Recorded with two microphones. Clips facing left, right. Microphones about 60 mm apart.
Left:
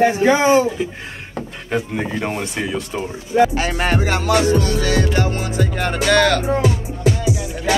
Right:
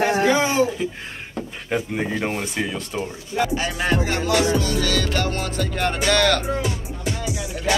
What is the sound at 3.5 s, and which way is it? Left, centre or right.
Music, left.